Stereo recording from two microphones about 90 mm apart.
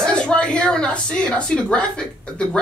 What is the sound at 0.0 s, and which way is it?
A woman's voice, 10° left (ahead or behind).